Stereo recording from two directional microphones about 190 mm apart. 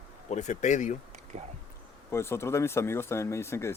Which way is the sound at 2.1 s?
15° left (ahead or behind).